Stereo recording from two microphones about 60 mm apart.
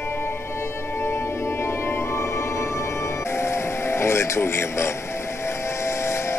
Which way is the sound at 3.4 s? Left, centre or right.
Left.